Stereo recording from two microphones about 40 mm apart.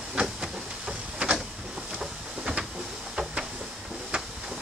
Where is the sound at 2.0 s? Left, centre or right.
Centre.